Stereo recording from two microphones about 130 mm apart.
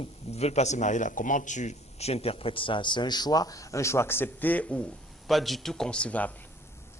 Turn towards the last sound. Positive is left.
turn(degrees=10)  # may be behind; listen again after turning